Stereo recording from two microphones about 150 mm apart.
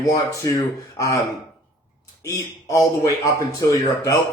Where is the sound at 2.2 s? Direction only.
20° left (ahead or behind).